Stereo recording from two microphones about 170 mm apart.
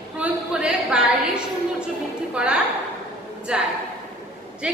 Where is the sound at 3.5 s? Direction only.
5° right (ahead or behind).